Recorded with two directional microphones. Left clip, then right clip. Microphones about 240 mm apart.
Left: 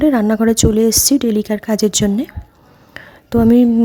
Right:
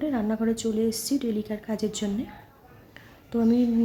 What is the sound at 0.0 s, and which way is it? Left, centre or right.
A woman's voice, left.